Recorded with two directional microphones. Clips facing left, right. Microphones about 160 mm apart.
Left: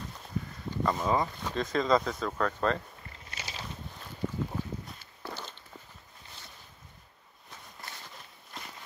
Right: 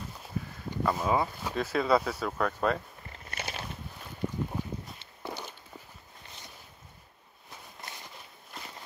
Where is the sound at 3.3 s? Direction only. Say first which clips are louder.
Right 5 dB; 55° right (ahead or behind).